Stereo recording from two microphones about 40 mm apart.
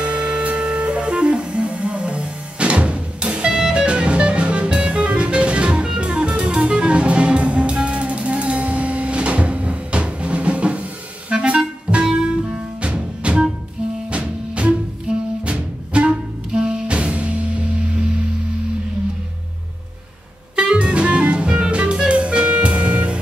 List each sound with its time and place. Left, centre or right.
0.0 s music: right
20.5 s music: right